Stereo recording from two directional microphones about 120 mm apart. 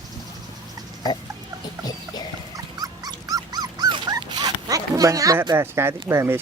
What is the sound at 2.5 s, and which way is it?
Dog, 30° right (ahead or behind).